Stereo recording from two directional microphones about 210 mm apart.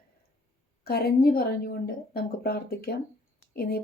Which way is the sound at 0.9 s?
50° left (ahead or behind).